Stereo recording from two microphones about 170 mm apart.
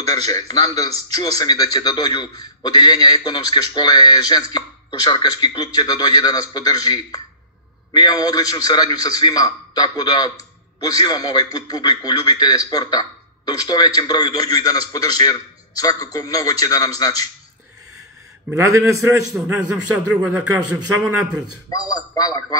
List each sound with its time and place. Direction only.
0.1 s a man's voice: 20° left (ahead or behind)
18.5 s a man's voice: 15° right (ahead or behind)
21.6 s a man's voice: 20° left (ahead or behind)